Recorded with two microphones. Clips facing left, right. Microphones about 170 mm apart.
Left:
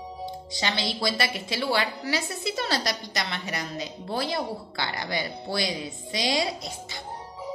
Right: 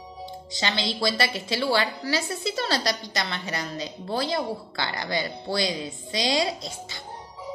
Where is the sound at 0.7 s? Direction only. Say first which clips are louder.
Right 2 dB; 20° right (ahead or behind).